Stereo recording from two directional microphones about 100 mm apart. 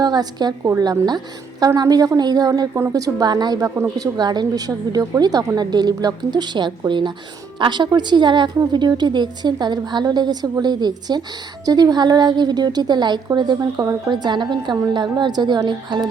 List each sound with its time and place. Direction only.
0.0 s a woman's voice: 40° right (ahead or behind)